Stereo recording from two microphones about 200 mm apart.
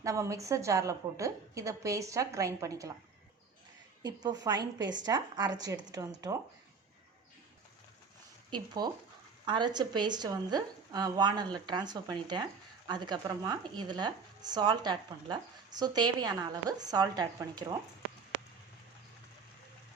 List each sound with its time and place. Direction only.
0.0 s a woman's voice: 15° right (ahead or behind)
4.0 s speech: 20° right (ahead or behind)
8.4 s speech: 20° right (ahead or behind)